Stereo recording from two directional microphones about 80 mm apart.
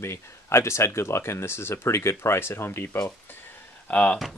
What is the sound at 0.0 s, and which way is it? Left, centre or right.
Speech, left.